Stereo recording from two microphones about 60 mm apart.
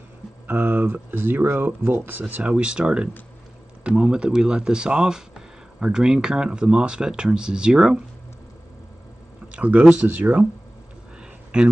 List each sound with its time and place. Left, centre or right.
0.5 s speech: right
2.5 s speech: centre
9.5 s speech: right
11.5 s speech: centre